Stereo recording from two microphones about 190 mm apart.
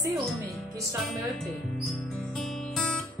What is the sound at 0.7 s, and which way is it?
Speech, 15° right (ahead or behind).